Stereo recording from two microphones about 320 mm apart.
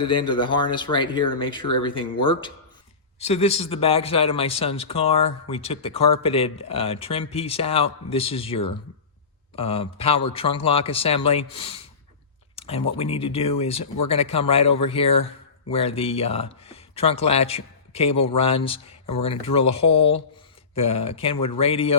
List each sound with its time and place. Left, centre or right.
0.0 s speech: centre